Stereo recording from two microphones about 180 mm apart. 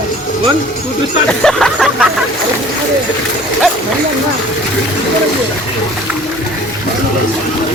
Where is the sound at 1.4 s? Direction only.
Centre (ahead or behind).